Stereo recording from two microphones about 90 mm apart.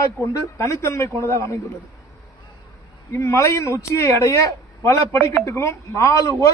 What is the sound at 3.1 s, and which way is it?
A man's voice, 35° left (ahead or behind).